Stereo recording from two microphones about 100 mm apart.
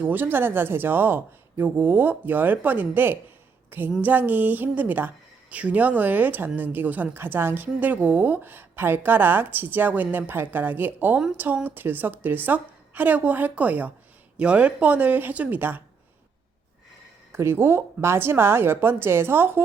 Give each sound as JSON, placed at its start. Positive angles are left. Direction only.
{"t": 0.0, "sound": "a woman's voice", "side_deg": -20}
{"t": 17.3, "sound": "a woman's voice", "side_deg": -25}